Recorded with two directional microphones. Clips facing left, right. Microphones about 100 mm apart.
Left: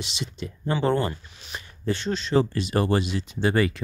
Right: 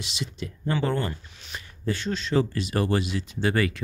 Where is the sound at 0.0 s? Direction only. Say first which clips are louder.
Left 1 dB; 25° left (ahead or behind).